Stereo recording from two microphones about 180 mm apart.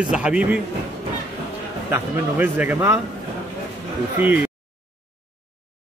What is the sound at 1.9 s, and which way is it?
A man's voice, 10° right (ahead or behind).